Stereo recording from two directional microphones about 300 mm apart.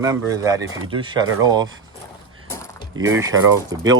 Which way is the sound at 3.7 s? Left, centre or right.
Centre.